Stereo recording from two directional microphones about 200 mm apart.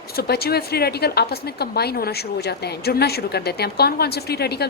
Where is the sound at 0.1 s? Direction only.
50° left (ahead or behind).